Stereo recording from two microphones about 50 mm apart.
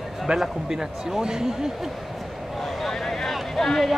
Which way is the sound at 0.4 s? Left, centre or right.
Centre.